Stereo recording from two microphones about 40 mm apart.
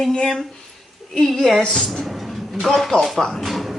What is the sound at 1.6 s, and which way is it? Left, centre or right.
Speech, centre.